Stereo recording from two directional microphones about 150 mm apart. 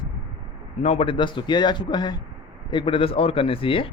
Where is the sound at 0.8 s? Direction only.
40° left (ahead or behind).